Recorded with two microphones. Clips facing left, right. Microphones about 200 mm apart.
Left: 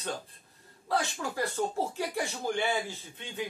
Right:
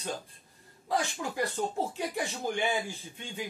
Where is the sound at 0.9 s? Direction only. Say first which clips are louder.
Even; 15° right (ahead or behind).